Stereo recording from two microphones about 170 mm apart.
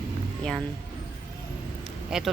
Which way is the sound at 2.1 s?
5° right (ahead or behind).